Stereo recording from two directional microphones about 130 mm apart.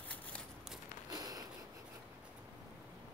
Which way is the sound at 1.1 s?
30° right (ahead or behind).